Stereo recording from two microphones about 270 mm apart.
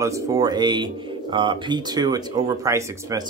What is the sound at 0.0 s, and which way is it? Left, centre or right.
Speech, centre.